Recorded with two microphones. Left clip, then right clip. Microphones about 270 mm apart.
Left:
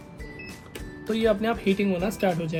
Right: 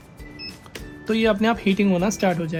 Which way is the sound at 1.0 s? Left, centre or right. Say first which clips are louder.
Right 4 dB; right.